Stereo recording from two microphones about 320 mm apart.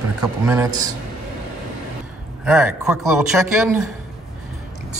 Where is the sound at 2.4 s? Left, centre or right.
Centre.